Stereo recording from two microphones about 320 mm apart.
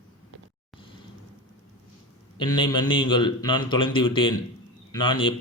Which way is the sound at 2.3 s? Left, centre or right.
Centre.